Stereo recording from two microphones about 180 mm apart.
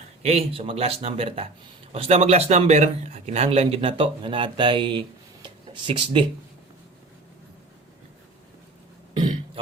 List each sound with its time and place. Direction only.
0.2 s speech: 35° right (ahead or behind)